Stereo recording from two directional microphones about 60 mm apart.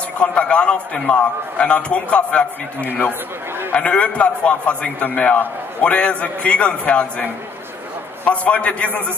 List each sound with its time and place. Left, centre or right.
0.2 s a man's voice: left
8.3 s a man's voice: centre